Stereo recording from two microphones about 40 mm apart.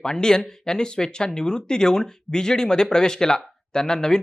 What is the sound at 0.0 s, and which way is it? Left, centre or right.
Speech, centre.